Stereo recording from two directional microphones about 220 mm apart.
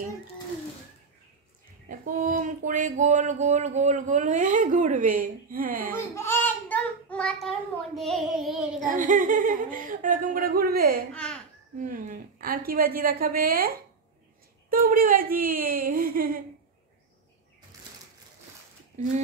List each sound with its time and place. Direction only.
1.9 s speech: 35° right (ahead or behind)
5.9 s a child's voice: 10° left (ahead or behind)
8.7 s speech: 35° right (ahead or behind)